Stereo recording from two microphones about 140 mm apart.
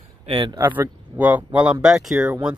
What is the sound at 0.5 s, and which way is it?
Speech, 15° right (ahead or behind).